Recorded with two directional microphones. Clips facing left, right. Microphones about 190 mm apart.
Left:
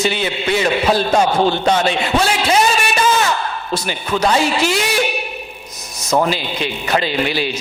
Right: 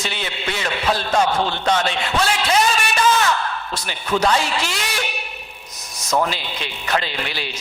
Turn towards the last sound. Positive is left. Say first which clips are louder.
# left 9 dB
turn(degrees=10)  # may be behind; listen again after turning